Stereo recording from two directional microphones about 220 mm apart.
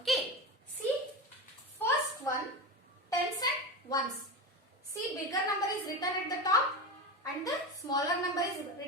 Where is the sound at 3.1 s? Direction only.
15° left (ahead or behind).